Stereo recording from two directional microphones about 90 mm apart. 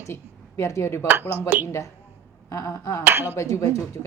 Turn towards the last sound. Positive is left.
turn(degrees=35)  # may be behind; listen again after turning